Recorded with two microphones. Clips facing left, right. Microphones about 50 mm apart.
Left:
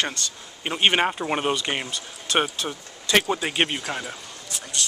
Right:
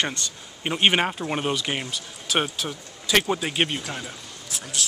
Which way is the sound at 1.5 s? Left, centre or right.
Centre.